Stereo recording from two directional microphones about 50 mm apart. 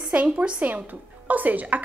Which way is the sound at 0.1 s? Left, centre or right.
Right.